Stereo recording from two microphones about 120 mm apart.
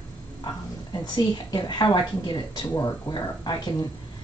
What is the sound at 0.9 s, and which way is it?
A woman's voice, 35° left (ahead or behind).